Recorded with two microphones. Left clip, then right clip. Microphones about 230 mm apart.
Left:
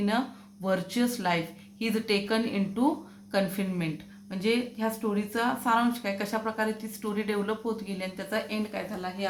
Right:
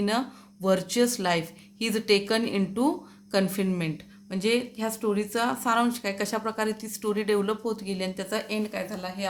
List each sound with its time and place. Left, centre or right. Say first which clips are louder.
0.6 s speech: right 5 dB; right